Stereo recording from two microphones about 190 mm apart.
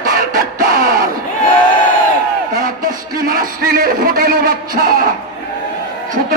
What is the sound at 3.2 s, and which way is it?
A man's voice, 50° right (ahead or behind).